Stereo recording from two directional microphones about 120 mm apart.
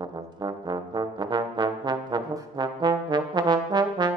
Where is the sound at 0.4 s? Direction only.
35° right (ahead or behind).